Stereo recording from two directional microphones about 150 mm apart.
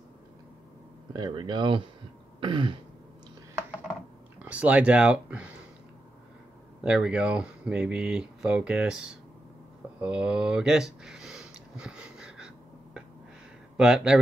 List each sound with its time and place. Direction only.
1.1 s speech: 30° right (ahead or behind)
4.4 s speech: 10° right (ahead or behind)
6.8 s speech: 5° right (ahead or behind)
10.0 s a sound: 5° right (ahead or behind)
13.7 s speech: 5° right (ahead or behind)